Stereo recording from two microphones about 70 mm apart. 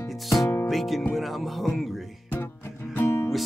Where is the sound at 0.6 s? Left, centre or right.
Centre.